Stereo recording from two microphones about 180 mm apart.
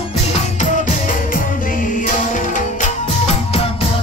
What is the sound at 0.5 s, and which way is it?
Music, 50° left (ahead or behind).